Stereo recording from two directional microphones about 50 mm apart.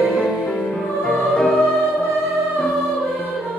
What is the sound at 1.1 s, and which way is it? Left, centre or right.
Music, centre.